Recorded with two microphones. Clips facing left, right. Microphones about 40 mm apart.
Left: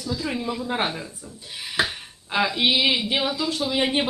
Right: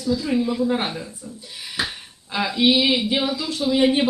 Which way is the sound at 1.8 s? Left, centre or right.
Left.